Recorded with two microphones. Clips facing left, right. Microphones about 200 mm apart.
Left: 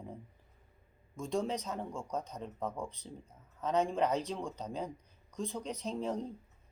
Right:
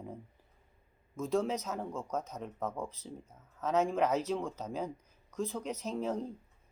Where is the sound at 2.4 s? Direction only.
30° left (ahead or behind).